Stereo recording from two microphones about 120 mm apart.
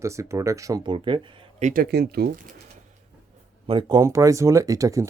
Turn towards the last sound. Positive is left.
turn(degrees=-25)  # may be behind; listen again after turning